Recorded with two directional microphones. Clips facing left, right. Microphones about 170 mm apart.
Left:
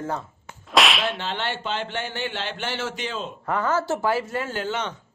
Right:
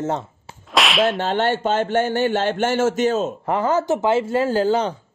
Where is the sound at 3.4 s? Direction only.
25° right (ahead or behind).